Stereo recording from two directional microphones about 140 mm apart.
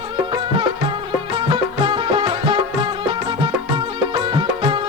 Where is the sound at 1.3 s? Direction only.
35° right (ahead or behind).